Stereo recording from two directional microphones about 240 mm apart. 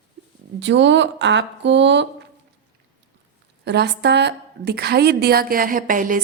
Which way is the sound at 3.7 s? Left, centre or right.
Right.